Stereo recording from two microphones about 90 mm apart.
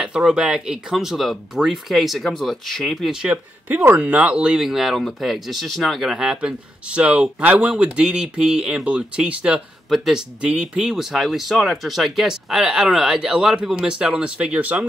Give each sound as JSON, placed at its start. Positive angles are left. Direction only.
{"t": 0.0, "sound": "speech", "side_deg": -10}
{"t": 3.6, "sound": "speech", "side_deg": -20}